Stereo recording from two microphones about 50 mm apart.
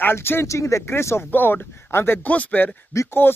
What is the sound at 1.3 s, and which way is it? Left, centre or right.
Speech, left.